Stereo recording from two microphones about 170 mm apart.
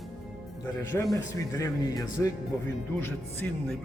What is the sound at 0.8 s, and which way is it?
Speech, 20° left (ahead or behind).